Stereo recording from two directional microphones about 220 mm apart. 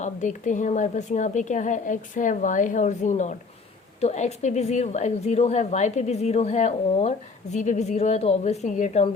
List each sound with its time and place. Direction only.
0.0 s a woman's voice: 35° left (ahead or behind)